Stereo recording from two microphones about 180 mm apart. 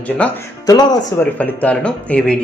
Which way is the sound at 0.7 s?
20° left (ahead or behind).